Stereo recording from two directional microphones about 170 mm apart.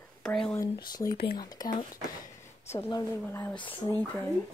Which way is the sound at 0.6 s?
20° left (ahead or behind).